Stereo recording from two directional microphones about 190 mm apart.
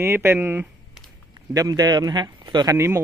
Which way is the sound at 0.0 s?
15° right (ahead or behind).